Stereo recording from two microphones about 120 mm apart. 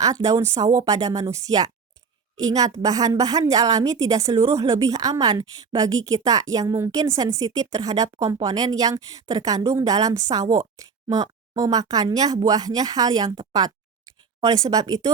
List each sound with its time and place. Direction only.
0.0 s a woman's voice: 30° right (ahead or behind)